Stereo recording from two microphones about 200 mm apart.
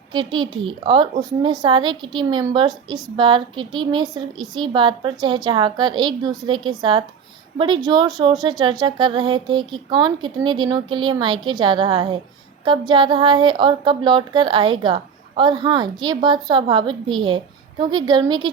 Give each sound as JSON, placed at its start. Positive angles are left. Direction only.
{"t": 0.1, "sound": "a woman's voice", "side_deg": -25}